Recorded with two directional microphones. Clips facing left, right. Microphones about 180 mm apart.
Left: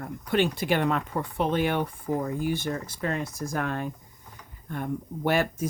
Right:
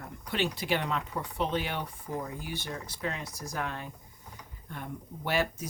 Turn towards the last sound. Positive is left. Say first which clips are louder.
# left 5 dB
turn(degrees=50)  # may be behind; listen again after turning